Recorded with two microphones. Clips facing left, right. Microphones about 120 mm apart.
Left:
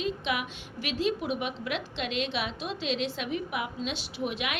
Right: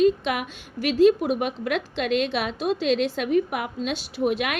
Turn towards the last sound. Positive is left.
turn(degrees=-45)  # may be behind; listen again after turning